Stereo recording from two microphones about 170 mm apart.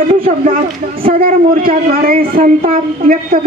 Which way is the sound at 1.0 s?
60° right (ahead or behind).